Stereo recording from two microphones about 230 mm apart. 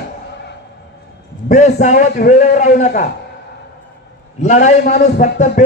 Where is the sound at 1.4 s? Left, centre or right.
Left.